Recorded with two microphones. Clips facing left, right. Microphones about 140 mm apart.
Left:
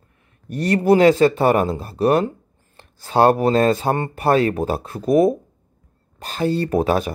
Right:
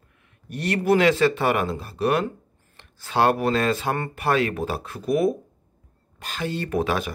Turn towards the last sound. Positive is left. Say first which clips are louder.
# left 6 dB
turn(degrees=35)  # may be behind; listen again after turning